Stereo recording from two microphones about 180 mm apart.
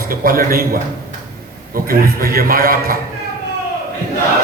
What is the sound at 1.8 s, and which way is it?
A man's voice, 55° right (ahead or behind).